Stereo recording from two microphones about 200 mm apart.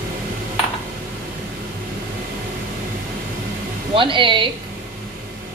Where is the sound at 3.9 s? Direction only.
25° right (ahead or behind).